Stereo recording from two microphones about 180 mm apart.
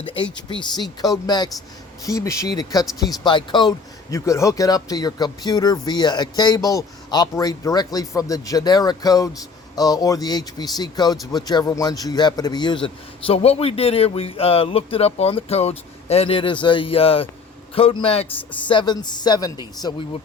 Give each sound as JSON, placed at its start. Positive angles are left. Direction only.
{"t": 0.3, "sound": "a man's voice", "side_deg": 25}